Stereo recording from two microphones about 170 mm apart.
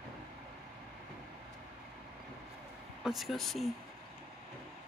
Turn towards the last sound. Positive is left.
turn(degrees=0)  # may be behind; listen again after turning